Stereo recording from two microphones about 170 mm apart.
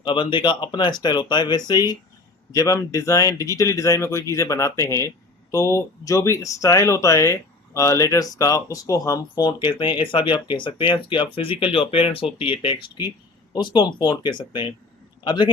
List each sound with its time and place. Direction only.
0.0 s a man's voice: 30° left (ahead or behind)